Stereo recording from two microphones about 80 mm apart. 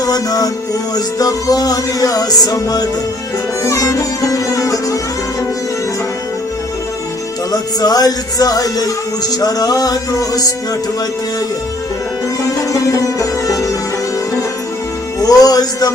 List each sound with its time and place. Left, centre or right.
0.0 s music: left
7.5 s music: left
12.5 s music: left
15.2 s music: left